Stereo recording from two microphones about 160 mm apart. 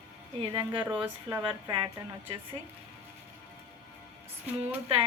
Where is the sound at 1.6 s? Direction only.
30° right (ahead or behind).